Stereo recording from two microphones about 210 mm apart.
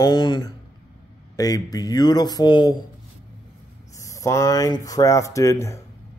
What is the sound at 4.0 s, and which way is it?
Speech, 15° left (ahead or behind).